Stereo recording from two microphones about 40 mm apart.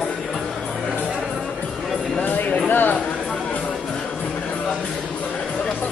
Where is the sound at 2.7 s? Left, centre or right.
Left.